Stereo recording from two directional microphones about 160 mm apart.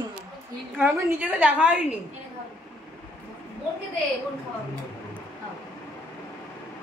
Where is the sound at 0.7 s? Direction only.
10° right (ahead or behind).